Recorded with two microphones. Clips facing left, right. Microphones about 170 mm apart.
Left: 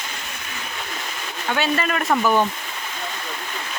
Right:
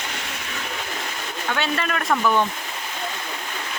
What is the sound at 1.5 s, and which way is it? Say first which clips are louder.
Speech: left 3 dB; 5° left (ahead or behind).